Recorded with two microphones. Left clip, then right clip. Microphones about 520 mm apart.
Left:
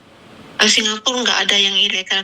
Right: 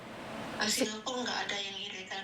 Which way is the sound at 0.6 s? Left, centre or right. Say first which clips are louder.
Left 19 dB; left.